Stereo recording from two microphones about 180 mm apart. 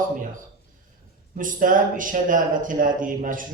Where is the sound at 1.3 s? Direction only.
50° right (ahead or behind).